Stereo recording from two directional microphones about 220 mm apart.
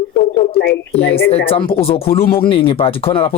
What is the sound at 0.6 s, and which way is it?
Speech, 50° left (ahead or behind).